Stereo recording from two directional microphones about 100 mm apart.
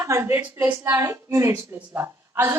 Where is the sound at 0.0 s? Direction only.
25° right (ahead or behind).